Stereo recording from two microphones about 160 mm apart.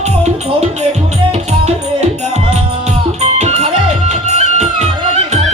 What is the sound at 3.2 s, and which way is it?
Music, 45° right (ahead or behind).